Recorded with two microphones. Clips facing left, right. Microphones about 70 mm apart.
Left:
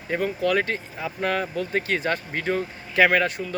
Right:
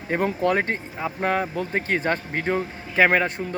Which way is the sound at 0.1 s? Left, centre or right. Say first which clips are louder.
Right 1 dB; right.